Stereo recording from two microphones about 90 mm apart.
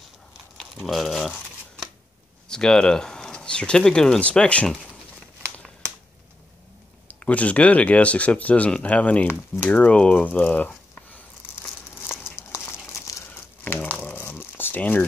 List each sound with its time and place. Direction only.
0.6 s crumpling: centre (ahead or behind)
2.4 s speech: 10° left (ahead or behind)
5.4 s crumpling: 15° left (ahead or behind)
7.1 s speech: 15° left (ahead or behind)
12.1 s crumpling: 10° right (ahead or behind)
14.0 s crumpling: 20° left (ahead or behind)